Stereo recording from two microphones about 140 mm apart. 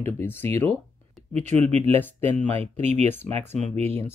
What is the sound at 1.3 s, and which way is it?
Speech, 55° right (ahead or behind).